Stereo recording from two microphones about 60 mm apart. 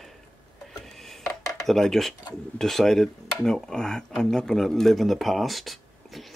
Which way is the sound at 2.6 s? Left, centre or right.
Centre.